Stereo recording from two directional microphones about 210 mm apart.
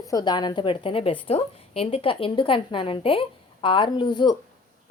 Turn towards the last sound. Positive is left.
turn(degrees=20)  # may be behind; listen again after turning